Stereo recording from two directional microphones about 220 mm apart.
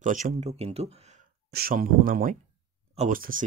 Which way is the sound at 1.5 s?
40° right (ahead or behind).